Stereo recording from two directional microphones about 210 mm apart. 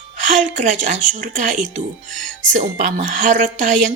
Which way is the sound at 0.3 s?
35° right (ahead or behind).